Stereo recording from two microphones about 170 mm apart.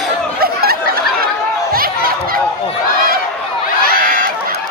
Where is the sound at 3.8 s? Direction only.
60° right (ahead or behind).